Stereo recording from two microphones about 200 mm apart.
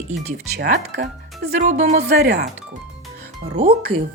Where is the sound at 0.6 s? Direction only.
40° right (ahead or behind).